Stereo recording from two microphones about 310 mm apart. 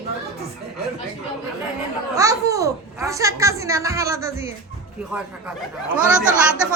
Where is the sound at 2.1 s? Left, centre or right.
Centre.